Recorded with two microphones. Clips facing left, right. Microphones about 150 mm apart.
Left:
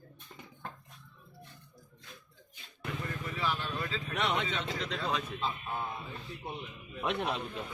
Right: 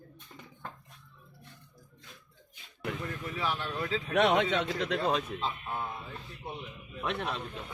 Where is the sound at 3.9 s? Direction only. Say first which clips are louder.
Right 9 dB; 65° right (ahead or behind).